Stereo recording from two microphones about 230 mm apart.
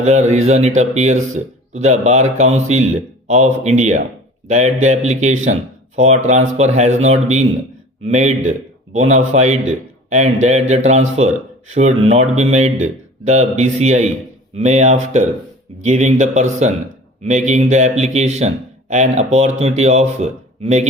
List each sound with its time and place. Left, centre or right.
0.0 s a man's voice: right